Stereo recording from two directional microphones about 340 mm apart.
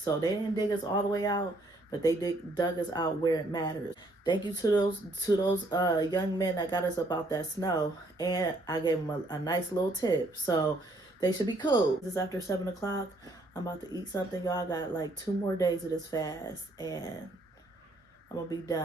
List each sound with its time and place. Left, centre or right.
0.0 s speech: centre
18.3 s speech: centre